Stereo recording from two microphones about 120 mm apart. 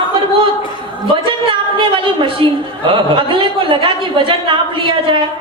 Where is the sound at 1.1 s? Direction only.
45° right (ahead or behind).